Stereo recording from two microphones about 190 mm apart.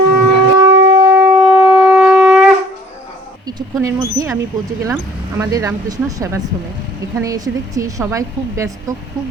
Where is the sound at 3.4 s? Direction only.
15° right (ahead or behind).